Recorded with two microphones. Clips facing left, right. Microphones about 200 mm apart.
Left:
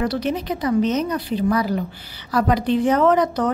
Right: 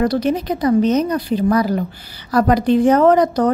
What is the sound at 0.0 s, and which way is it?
A woman's voice, 40° right (ahead or behind).